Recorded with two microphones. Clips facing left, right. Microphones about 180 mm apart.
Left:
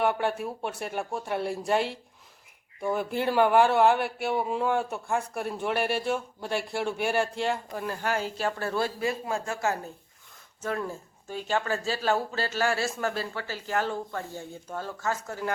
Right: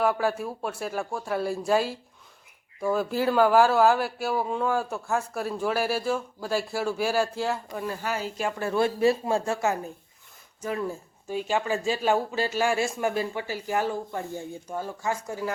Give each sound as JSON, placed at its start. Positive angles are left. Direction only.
{"t": 0.0, "sound": "speech", "side_deg": 0}
{"t": 3.2, "sound": "speech", "side_deg": 0}
{"t": 8.4, "sound": "speech", "side_deg": -15}
{"t": 10.6, "sound": "speech", "side_deg": -10}